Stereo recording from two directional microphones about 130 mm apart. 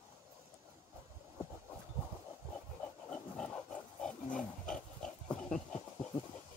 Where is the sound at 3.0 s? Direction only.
10° left (ahead or behind).